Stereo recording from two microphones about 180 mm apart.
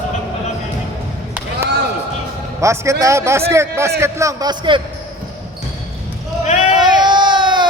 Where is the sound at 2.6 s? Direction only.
15° right (ahead or behind).